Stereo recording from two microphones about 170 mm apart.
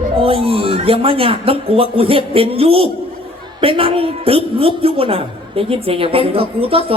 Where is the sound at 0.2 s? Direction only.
35° right (ahead or behind).